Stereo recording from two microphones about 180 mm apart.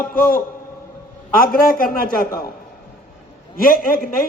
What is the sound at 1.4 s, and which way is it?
Speech, 50° left (ahead or behind).